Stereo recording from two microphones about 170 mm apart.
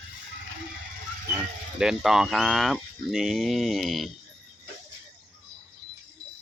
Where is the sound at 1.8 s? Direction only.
Centre (ahead or behind).